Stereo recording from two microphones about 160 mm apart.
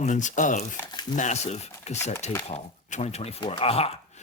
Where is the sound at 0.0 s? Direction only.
50° left (ahead or behind).